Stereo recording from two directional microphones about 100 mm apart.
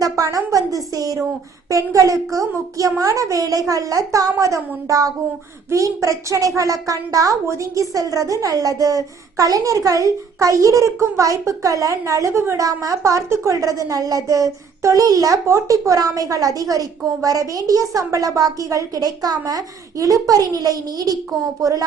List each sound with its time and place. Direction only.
0.0 s a woman's voice: 35° right (ahead or behind)